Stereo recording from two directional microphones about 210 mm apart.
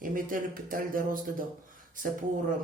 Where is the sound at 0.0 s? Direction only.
40° right (ahead or behind).